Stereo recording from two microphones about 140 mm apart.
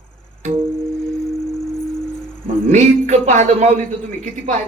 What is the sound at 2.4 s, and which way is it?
A man's voice, 55° right (ahead or behind).